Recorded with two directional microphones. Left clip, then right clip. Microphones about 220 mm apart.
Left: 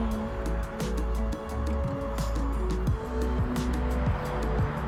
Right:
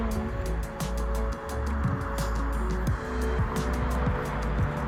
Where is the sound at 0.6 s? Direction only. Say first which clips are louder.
Left 1 dB; centre (ahead or behind).